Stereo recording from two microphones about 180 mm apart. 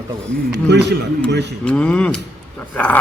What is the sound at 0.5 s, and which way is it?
A man's voice, 70° right (ahead or behind).